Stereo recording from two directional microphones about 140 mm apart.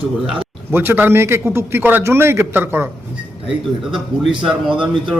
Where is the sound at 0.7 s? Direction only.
15° right (ahead or behind).